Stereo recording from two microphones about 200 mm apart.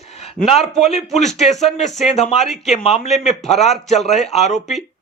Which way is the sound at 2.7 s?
35° left (ahead or behind).